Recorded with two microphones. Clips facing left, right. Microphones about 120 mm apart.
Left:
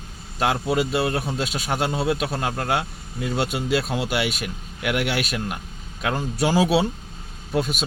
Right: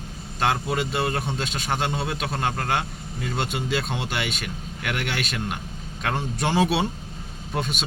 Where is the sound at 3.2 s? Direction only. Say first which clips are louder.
Left 3 dB; 5° left (ahead or behind).